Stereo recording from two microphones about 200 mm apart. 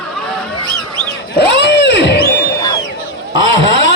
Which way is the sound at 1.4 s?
60° left (ahead or behind).